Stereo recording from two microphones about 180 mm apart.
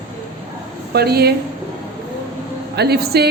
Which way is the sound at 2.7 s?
65° right (ahead or behind).